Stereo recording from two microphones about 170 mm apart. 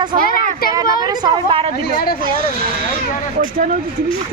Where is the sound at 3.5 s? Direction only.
55° right (ahead or behind).